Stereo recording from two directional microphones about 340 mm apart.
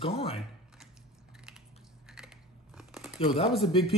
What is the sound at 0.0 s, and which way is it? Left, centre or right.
Typing, centre.